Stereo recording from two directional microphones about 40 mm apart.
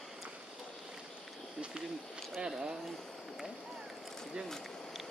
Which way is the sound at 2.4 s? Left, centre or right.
Right.